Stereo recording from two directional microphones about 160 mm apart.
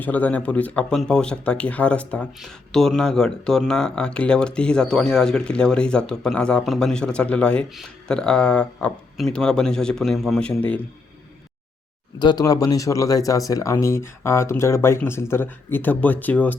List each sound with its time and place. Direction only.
0.0 s speech: 10° left (ahead or behind)
12.2 s speech: 25° left (ahead or behind); by 16.6 s 10° left (ahead or behind)